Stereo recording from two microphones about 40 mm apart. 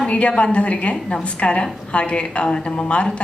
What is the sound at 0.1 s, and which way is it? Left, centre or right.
A woman's voice, left.